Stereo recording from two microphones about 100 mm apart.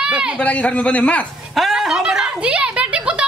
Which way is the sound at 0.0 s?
10° right (ahead or behind).